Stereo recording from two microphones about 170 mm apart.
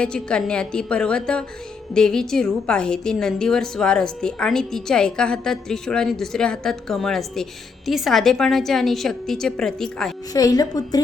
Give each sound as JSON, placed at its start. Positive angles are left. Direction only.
{"t": 0.0, "sound": "a woman's voice", "side_deg": 5}
{"t": 10.3, "sound": "speech", "side_deg": 20}